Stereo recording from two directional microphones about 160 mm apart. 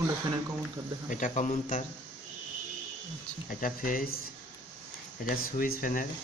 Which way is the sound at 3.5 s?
60° left (ahead or behind).